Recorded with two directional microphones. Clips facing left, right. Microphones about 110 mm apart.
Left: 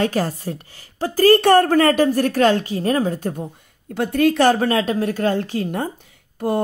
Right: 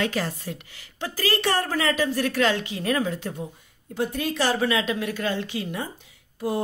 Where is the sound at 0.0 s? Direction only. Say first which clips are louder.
Left 6 dB; 40° left (ahead or behind).